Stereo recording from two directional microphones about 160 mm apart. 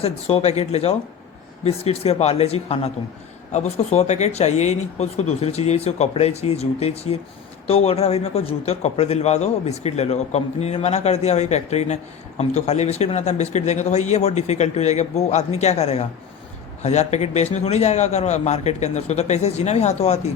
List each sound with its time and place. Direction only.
0.0 s a man's voice: 40° left (ahead or behind)